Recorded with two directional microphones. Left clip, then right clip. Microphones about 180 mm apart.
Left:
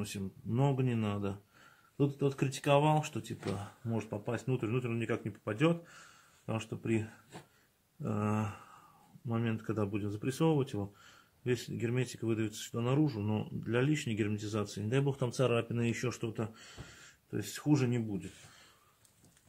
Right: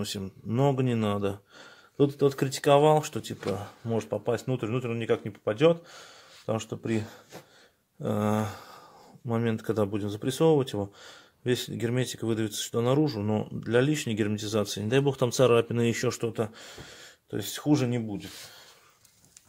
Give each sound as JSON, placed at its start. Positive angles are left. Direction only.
{"t": 0.0, "sound": "speech", "side_deg": -40}
{"t": 8.0, "sound": "speech", "side_deg": -45}